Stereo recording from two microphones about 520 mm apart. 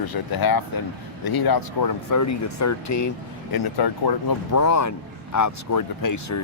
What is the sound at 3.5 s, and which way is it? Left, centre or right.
Speech, left.